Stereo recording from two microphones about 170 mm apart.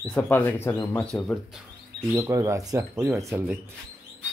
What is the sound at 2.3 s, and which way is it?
Speech, 20° right (ahead or behind).